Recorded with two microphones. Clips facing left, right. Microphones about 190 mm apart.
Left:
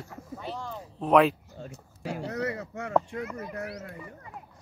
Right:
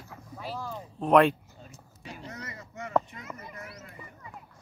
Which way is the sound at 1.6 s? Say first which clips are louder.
Left 13 dB; 75° left (ahead or behind).